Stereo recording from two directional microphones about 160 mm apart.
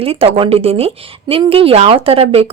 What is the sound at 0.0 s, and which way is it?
Speech, 35° right (ahead or behind).